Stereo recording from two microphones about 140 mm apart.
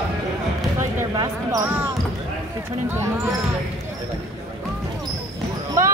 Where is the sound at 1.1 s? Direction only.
25° right (ahead or behind).